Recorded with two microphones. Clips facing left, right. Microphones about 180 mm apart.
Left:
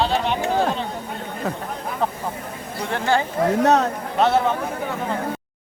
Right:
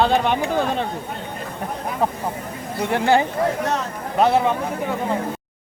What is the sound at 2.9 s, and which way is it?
Speech, 15° right (ahead or behind).